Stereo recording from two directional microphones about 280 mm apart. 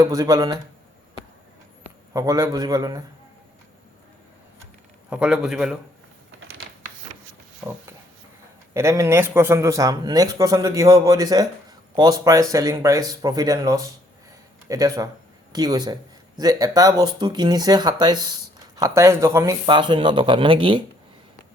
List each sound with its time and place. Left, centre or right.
0.0 s speech: centre
2.1 s speech: centre
5.0 s a man's voice: centre
8.7 s speech: centre